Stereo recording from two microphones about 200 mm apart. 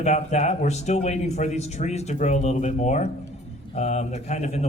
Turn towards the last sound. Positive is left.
turn(degrees=35)  # may be behind; listen again after turning